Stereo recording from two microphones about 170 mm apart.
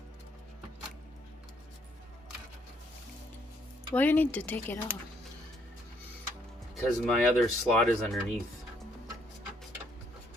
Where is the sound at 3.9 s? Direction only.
10° left (ahead or behind).